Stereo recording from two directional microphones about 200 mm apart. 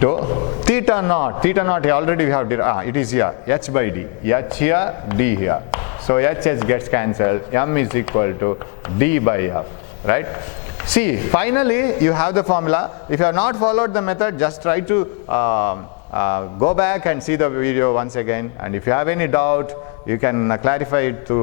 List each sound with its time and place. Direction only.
0.0 s a sound: 15° left (ahead or behind)
0.6 s a man's voice: 10° left (ahead or behind)
16.4 s speech: 25° left (ahead or behind)
16.7 s a man's voice: 10° left (ahead or behind)